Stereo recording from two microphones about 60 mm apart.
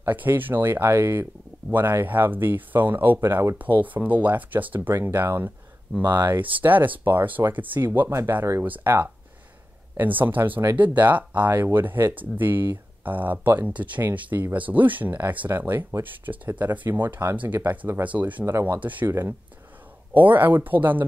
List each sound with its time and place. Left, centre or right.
0.0 s speech: right
9.9 s speech: right
18.0 s speech: right
18.4 s speech: right
18.8 s speech: right
19.0 s speech: right